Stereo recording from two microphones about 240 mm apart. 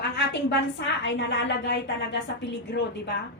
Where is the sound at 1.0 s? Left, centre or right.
Left.